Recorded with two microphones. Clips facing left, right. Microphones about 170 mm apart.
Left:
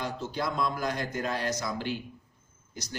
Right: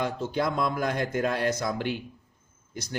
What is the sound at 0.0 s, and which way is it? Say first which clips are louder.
Speech: right 5 dB; 55° right (ahead or behind).